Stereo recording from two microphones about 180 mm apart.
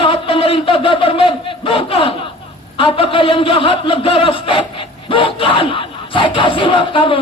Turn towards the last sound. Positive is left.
turn(degrees=30)  # may be behind; listen again after turning